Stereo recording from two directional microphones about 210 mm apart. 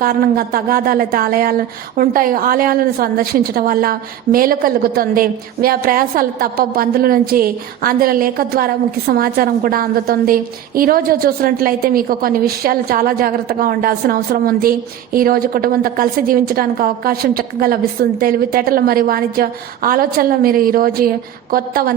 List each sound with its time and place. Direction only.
0.0 s speech: 45° right (ahead or behind)